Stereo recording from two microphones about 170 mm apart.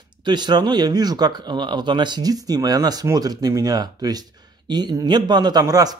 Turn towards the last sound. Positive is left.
turn(degrees=-20)  # may be behind; listen again after turning